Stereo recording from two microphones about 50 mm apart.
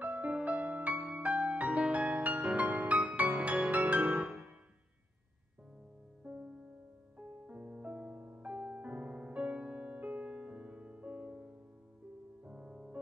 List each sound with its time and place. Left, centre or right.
0.0 s music: right
6.2 s music: right
12.4 s music: centre